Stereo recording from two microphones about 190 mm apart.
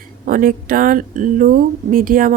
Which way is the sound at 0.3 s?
45° right (ahead or behind).